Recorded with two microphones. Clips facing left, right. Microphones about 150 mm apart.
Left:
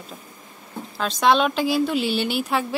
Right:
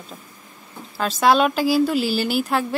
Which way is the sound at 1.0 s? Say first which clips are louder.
Right 2 dB; 5° right (ahead or behind).